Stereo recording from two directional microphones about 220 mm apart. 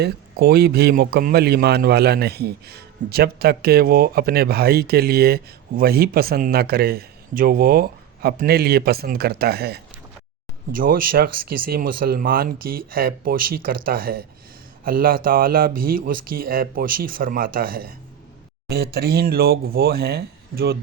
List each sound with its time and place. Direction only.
0.0 s a man's voice: 45° right (ahead or behind)